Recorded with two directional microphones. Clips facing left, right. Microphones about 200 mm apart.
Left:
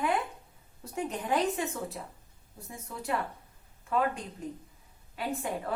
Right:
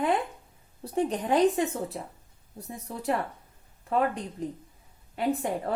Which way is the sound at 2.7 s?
35° right (ahead or behind).